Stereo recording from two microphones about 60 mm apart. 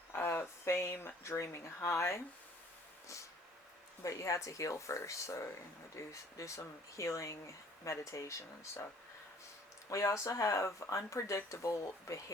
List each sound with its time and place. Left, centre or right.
0.1 s speech: left
4.0 s speech: left
9.9 s speech: left